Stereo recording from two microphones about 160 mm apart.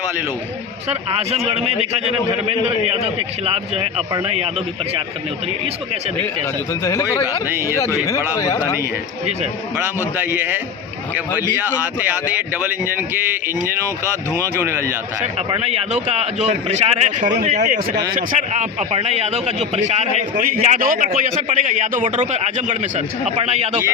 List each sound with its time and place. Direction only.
0.9 s a man's voice: 40° right (ahead or behind)
6.8 s speech: 20° left (ahead or behind)
7.4 s speech: 15° right (ahead or behind)
8.4 s speech: 20° left (ahead or behind)
10.2 s speech: 10° right (ahead or behind)
12.3 s speech: 10° right (ahead or behind)
14.3 s speech: 15° right (ahead or behind)
15.4 s a man's voice: 40° right (ahead or behind)
20.3 s a man's voice: 60° right (ahead or behind)
21.1 s a man's voice: 50° right (ahead or behind)